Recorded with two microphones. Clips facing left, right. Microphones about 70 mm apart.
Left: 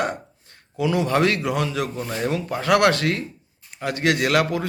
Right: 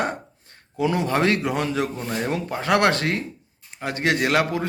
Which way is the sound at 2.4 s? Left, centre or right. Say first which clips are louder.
Left 2 dB; right.